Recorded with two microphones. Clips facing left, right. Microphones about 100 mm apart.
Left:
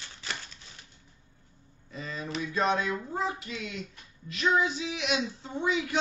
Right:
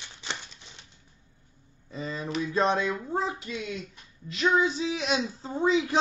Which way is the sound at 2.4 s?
35° right (ahead or behind).